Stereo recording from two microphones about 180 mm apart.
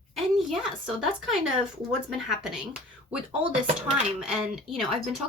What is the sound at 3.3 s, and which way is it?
Speech, 35° right (ahead or behind).